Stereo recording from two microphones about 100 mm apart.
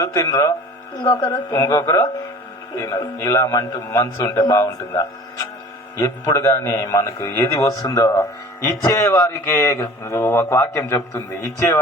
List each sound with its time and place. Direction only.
0.0 s a man's voice: 40° left (ahead or behind)